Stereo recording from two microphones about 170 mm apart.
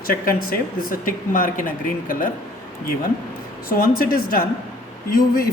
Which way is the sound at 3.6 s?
60° left (ahead or behind).